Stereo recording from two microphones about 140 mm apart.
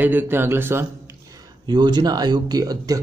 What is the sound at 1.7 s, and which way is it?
Speech, 30° right (ahead or behind).